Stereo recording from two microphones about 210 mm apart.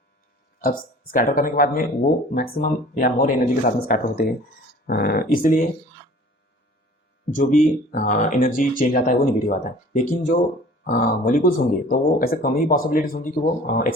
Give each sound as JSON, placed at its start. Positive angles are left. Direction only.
{"t": 0.6, "sound": "speech", "side_deg": 40}
{"t": 7.3, "sound": "speech", "side_deg": 40}